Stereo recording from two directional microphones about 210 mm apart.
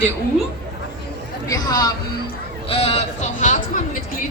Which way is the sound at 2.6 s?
25° left (ahead or behind).